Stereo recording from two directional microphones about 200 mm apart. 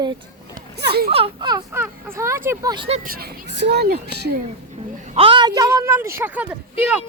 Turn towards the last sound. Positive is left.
turn(degrees=-10)  # may be behind; listen again after turning